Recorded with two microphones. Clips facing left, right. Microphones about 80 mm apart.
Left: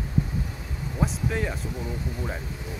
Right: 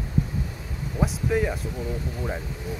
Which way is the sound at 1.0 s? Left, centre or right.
Centre.